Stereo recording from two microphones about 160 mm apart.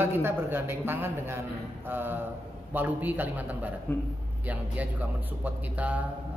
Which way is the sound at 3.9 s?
10° left (ahead or behind).